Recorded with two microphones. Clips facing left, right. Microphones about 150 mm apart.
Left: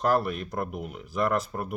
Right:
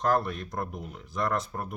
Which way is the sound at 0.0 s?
10° left (ahead or behind).